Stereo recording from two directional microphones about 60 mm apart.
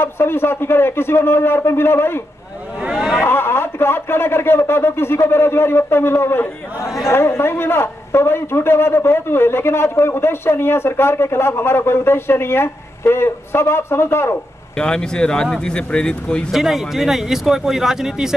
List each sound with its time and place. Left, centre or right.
0.0 s speech: left
2.9 s a sound: centre
3.3 s a man's voice: left
14.8 s speech: centre
16.5 s speech: centre